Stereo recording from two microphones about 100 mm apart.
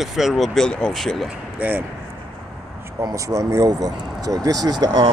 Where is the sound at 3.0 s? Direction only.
35° right (ahead or behind).